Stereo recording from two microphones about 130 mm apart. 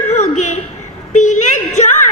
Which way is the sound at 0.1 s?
65° left (ahead or behind).